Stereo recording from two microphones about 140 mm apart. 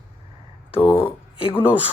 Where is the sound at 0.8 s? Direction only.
40° left (ahead or behind).